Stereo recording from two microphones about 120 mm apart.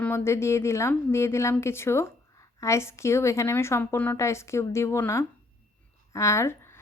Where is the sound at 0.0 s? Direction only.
20° left (ahead or behind).